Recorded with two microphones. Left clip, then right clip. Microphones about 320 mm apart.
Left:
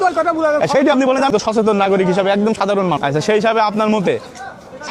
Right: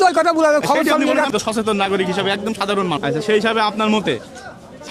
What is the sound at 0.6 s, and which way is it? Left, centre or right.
Speech, left.